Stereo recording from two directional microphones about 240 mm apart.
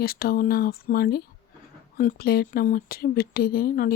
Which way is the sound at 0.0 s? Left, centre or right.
Left.